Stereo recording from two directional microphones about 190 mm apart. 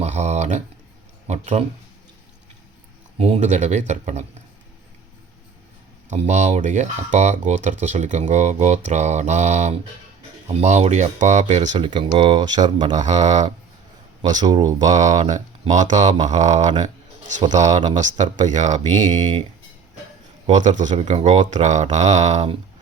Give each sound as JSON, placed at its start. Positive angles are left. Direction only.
{"t": 0.0, "sound": "a sound", "side_deg": -35}
{"t": 1.3, "sound": "speech", "side_deg": -35}
{"t": 3.2, "sound": "speech", "side_deg": -35}
{"t": 6.1, "sound": "speech", "side_deg": -35}
{"t": 11.8, "sound": "speech", "side_deg": -25}
{"t": 13.0, "sound": "speech", "side_deg": -40}
{"t": 14.4, "sound": "speech", "side_deg": -20}
{"t": 14.8, "sound": "a man's voice", "side_deg": -40}
{"t": 20.5, "sound": "speech", "side_deg": -40}